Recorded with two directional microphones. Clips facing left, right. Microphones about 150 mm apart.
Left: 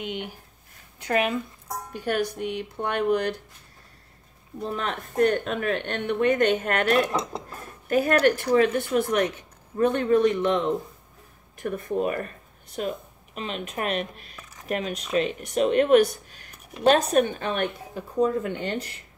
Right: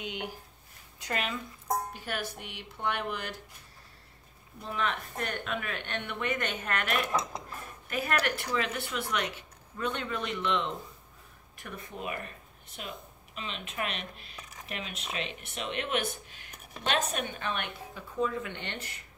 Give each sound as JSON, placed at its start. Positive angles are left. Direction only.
{"t": 0.9, "sound": "speech", "side_deg": 60}
{"t": 2.0, "sound": "speech", "side_deg": 50}
{"t": 4.6, "sound": "speech", "side_deg": 40}
{"t": 7.1, "sound": "speech", "side_deg": 30}
{"t": 7.9, "sound": "speech", "side_deg": 40}
{"t": 8.5, "sound": "speech", "side_deg": 50}